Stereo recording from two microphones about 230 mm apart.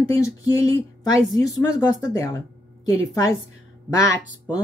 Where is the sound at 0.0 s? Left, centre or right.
Centre.